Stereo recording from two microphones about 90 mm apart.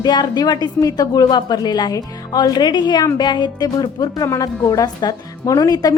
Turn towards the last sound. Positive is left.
turn(degrees=45)  # may be behind; listen again after turning